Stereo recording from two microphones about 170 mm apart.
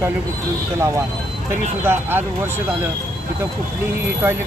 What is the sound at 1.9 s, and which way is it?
Speech, 15° right (ahead or behind).